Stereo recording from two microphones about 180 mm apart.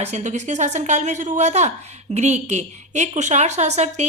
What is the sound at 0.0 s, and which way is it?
Speech, 40° right (ahead or behind).